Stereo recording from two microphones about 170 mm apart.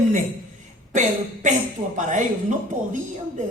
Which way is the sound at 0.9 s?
45° right (ahead or behind).